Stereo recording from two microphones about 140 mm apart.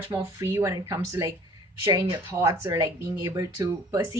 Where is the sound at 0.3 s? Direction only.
20° right (ahead or behind).